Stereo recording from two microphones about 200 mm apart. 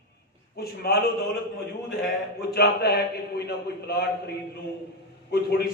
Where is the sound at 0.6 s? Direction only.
50° left (ahead or behind).